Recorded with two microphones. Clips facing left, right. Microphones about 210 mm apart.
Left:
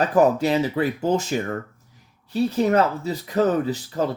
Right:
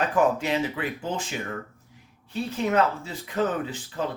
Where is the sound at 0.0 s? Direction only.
35° left (ahead or behind).